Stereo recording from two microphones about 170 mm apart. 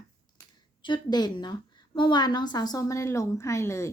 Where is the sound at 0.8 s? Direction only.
25° left (ahead or behind).